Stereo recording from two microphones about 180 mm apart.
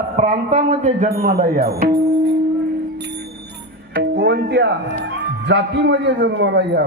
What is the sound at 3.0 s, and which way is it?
Music, 70° right (ahead or behind).